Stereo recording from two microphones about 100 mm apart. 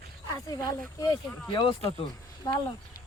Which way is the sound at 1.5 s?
60° left (ahead or behind).